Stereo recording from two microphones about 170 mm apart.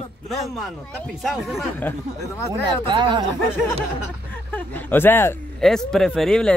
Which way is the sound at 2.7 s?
25° right (ahead or behind).